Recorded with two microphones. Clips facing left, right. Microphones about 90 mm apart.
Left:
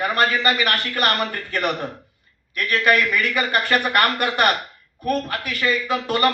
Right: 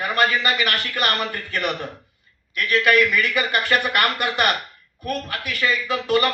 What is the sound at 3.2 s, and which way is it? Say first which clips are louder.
A man's voice: even; 45° left (ahead or behind).